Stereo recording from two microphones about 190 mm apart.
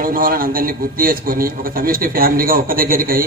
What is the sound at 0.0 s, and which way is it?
A man's voice, 50° right (ahead or behind).